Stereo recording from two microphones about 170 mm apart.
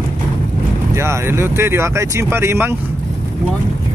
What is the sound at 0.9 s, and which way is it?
Speech, 15° right (ahead or behind).